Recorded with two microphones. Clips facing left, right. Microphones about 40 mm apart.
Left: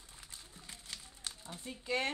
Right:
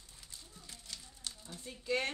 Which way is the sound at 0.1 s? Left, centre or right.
Left.